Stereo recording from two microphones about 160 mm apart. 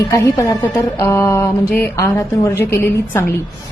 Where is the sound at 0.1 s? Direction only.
20° left (ahead or behind).